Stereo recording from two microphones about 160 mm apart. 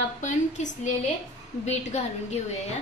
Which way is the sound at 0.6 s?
45° left (ahead or behind).